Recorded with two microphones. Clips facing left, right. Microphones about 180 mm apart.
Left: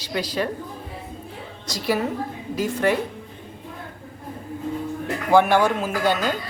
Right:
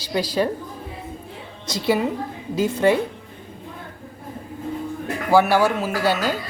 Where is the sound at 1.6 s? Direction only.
25° right (ahead or behind).